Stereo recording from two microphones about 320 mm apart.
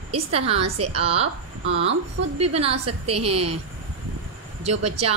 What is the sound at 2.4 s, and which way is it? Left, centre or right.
Speech, centre.